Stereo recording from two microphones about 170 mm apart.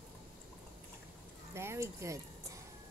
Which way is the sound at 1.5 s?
15° right (ahead or behind).